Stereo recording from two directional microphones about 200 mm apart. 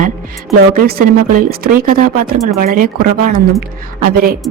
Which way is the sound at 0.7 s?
50° right (ahead or behind).